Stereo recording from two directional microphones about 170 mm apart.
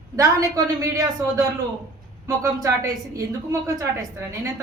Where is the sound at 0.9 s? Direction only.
20° right (ahead or behind).